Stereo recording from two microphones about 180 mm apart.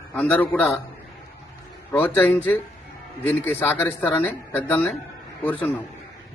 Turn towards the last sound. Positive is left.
turn(degrees=10)  # may be behind; listen again after turning